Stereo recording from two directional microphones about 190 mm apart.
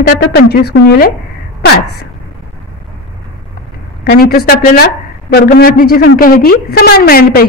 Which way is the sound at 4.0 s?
55° left (ahead or behind).